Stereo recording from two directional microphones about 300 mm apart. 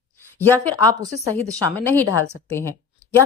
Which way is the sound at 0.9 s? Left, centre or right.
Right.